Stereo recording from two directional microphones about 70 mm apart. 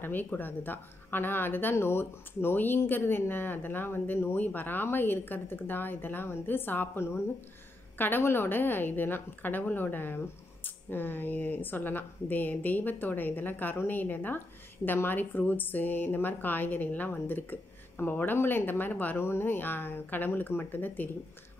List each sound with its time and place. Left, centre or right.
0.0 s a woman's voice: left